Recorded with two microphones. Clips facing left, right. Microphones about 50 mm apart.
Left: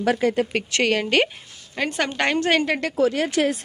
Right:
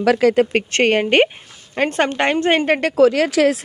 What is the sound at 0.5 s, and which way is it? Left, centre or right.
Speech, right.